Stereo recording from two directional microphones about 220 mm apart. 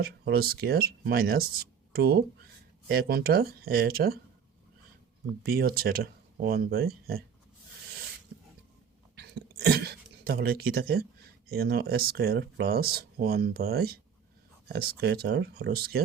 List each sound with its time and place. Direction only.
0.0 s speech: 45° right (ahead or behind)
5.5 s speech: 45° right (ahead or behind)
9.1 s a sound: 45° right (ahead or behind)
11.4 s speech: 45° right (ahead or behind)